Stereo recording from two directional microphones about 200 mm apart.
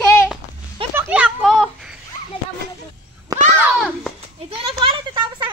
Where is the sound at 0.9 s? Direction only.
10° right (ahead or behind).